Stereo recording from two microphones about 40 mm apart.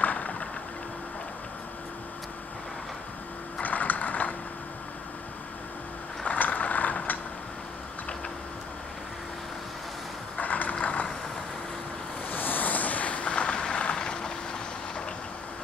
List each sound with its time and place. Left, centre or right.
0.0 s boat: left
3.6 s a sound: left
6.2 s vehicle: left
10.3 s vehicle: left
12.3 s a sound: left
13.9 s vehicle: left